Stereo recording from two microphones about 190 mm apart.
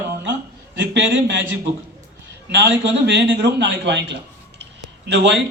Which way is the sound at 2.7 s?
65° right (ahead or behind).